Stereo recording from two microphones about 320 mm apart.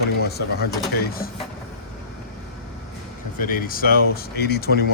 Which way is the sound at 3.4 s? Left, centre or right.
Left.